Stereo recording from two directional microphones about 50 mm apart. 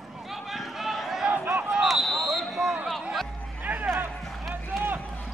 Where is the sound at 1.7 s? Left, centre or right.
Centre.